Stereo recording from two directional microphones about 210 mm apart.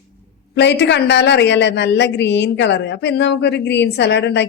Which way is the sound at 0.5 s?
55° left (ahead or behind).